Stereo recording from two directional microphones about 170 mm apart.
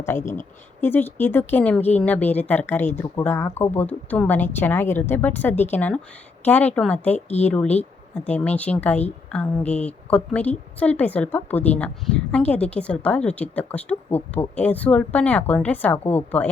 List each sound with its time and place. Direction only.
0.0 s speech: 15° left (ahead or behind)